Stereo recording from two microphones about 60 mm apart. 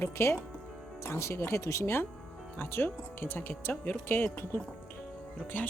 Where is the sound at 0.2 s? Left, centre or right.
Left.